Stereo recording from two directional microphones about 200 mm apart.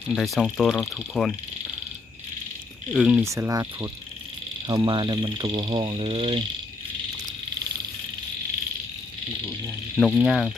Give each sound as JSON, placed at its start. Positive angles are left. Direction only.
{"t": 0.1, "sound": "speech", "side_deg": 0}
{"t": 2.9, "sound": "speech", "side_deg": -5}
{"t": 3.2, "sound": "cricket", "side_deg": -15}
{"t": 4.7, "sound": "speech", "side_deg": -20}
{"t": 10.0, "sound": "speech", "side_deg": 0}